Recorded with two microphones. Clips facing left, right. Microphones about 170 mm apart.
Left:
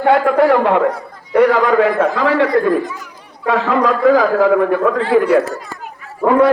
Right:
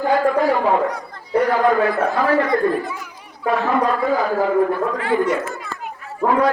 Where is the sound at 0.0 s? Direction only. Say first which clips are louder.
Left 5 dB; 75° left (ahead or behind); by 4.6 s 90° left.